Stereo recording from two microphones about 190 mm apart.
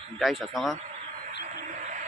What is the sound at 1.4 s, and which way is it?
Radio, 40° right (ahead or behind).